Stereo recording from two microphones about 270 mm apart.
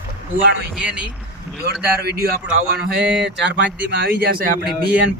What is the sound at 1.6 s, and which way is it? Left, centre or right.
A man's voice, right.